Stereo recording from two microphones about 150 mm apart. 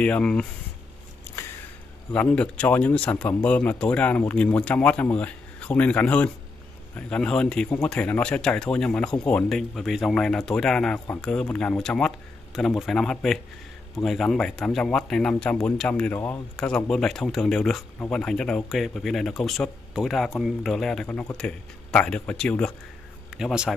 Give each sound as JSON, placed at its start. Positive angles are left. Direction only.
{"t": 0.0, "sound": "speech", "side_deg": 5}
{"t": 1.4, "sound": "a sound", "side_deg": 20}
{"t": 2.1, "sound": "speech", "side_deg": 10}
{"t": 23.3, "sound": "speech", "side_deg": -5}